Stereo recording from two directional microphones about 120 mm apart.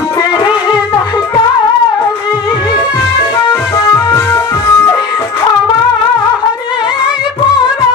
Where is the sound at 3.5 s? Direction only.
25° left (ahead or behind).